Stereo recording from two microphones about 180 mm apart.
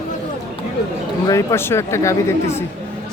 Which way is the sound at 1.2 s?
15° left (ahead or behind).